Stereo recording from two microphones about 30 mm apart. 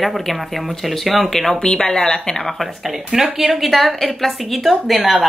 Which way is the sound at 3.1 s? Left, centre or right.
Centre.